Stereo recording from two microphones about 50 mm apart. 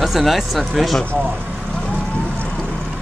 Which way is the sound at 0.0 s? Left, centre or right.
Centre.